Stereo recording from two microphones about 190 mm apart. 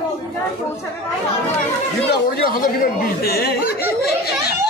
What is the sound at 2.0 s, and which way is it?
Speech, 50° left (ahead or behind).